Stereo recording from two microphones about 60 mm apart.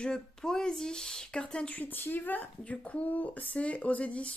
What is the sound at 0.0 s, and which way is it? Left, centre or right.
Speech, centre.